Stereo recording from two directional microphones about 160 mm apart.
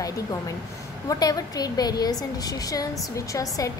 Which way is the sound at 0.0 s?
20° left (ahead or behind).